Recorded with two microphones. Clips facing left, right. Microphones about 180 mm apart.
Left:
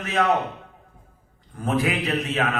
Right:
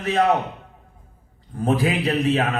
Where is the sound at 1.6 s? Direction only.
30° right (ahead or behind).